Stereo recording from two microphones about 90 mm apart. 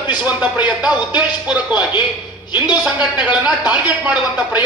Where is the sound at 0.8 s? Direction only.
15° right (ahead or behind).